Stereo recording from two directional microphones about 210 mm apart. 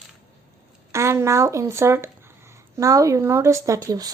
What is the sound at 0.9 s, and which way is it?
Speech, 15° right (ahead or behind).